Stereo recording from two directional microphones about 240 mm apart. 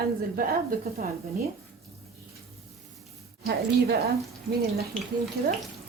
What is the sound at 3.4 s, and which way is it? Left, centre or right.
Speech, right.